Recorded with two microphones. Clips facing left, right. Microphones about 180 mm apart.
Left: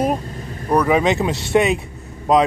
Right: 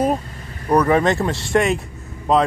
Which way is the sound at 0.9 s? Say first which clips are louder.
Even; 5° left (ahead or behind).